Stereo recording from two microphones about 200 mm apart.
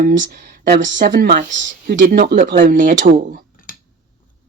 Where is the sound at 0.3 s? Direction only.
45° right (ahead or behind).